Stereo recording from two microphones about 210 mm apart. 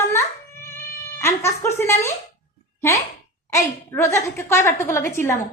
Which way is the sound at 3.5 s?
15° left (ahead or behind).